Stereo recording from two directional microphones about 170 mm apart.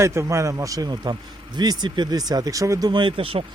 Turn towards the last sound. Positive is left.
turn(degrees=-30)  # may be behind; listen again after turning